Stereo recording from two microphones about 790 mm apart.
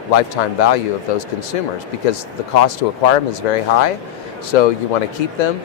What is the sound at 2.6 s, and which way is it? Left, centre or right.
Speech, left.